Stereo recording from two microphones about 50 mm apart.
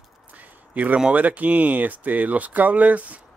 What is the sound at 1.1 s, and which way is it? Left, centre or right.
Speech, right.